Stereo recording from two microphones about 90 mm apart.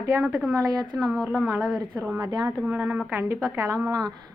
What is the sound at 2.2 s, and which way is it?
Speech, 45° right (ahead or behind).